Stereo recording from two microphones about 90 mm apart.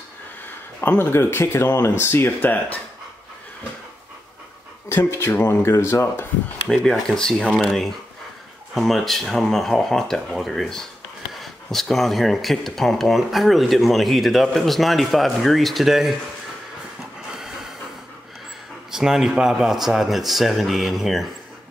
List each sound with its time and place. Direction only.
0.7 s speech: 25° left (ahead or behind)
4.8 s speech: 25° left (ahead or behind)
6.7 s speech: 5° left (ahead or behind)
17.3 s a sound: 5° right (ahead or behind)
18.9 s speech: 5° right (ahead or behind)